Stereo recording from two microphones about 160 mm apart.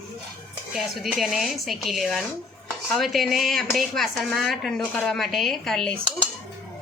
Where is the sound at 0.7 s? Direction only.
Centre (ahead or behind).